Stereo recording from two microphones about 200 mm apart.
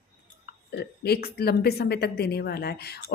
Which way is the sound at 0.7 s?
50° left (ahead or behind).